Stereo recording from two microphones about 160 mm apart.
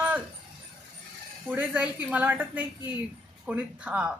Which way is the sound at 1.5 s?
10° right (ahead or behind).